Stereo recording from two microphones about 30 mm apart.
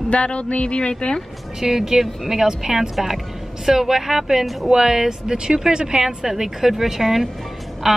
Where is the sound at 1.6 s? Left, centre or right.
Centre.